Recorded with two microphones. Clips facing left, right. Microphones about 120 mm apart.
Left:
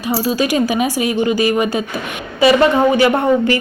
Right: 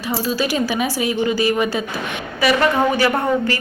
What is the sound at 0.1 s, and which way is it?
A woman's voice, 15° left (ahead or behind).